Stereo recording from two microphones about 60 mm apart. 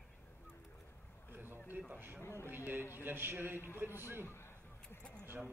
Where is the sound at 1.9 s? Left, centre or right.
Right.